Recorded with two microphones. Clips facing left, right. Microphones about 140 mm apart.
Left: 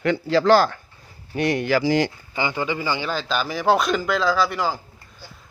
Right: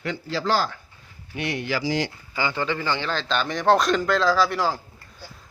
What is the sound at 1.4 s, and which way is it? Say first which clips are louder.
Speech: left 7 dB; 45° left (ahead or behind).